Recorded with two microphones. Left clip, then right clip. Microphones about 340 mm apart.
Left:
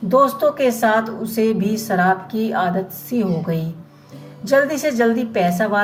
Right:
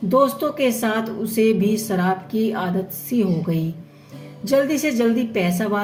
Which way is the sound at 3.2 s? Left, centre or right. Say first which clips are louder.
Left 1 dB; centre.